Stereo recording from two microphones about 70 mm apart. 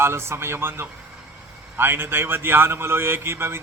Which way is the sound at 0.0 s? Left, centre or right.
Right.